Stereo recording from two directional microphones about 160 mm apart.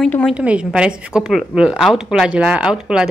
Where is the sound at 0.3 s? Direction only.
5° right (ahead or behind).